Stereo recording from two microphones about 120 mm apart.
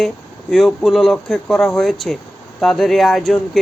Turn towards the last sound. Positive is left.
turn(degrees=0)  # may be behind; listen again after turning